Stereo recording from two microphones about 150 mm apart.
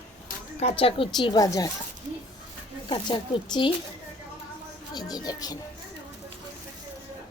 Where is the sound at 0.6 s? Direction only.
40° left (ahead or behind); by 1.7 s 20° left (ahead or behind).